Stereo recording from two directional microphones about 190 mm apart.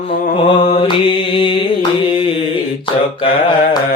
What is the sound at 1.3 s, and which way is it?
Music, 25° left (ahead or behind).